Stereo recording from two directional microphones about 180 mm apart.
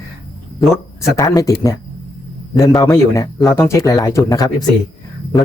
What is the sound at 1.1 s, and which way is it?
Speech, 20° left (ahead or behind).